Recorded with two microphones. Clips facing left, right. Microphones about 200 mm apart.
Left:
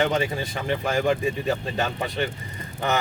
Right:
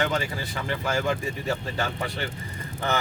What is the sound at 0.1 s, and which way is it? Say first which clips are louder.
Speech: left 4 dB; 20° left (ahead or behind).